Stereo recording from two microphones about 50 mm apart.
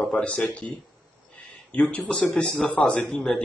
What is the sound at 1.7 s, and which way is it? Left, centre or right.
A man's voice, left.